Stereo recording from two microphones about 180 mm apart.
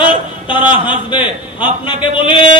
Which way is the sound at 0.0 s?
30° left (ahead or behind).